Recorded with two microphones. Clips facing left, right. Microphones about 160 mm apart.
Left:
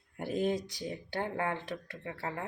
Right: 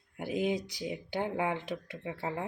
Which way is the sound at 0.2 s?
5° right (ahead or behind).